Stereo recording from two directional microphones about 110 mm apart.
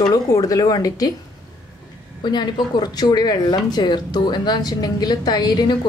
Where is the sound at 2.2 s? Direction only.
40° left (ahead or behind).